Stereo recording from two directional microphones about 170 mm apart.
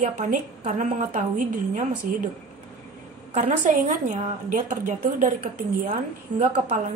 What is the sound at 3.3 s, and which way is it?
A woman's voice, 45° right (ahead or behind).